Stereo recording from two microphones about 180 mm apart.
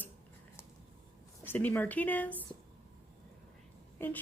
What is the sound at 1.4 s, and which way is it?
Speech, 10° left (ahead or behind).